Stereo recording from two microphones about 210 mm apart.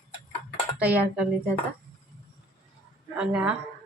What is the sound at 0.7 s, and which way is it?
Speech, 5° right (ahead or behind).